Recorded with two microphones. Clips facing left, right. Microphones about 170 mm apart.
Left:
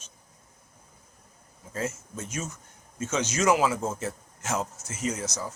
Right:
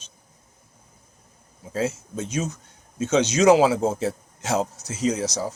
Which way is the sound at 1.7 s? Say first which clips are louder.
Right 7 dB; 75° right (ahead or behind).